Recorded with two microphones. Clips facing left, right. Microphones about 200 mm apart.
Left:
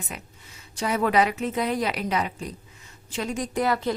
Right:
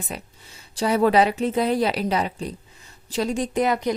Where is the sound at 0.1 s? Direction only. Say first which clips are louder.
Right 5 dB; 30° right (ahead or behind).